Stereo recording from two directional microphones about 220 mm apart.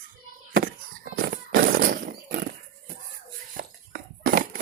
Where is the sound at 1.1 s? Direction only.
40° right (ahead or behind).